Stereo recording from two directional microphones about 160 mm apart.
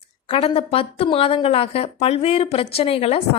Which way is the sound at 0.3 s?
35° left (ahead or behind).